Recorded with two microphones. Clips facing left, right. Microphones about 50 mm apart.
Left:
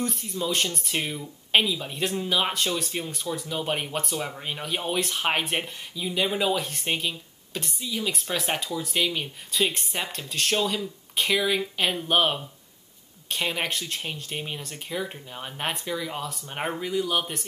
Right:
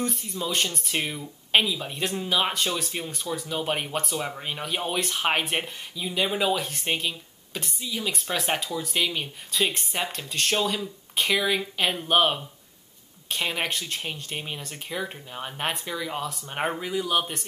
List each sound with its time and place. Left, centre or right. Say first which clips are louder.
0.0 s speech: left 1 dB; centre